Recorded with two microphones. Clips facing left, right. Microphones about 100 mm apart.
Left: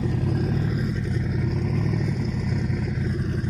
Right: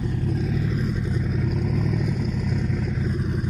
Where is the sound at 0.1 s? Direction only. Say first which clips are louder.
Left 1 dB; 75° left (ahead or behind).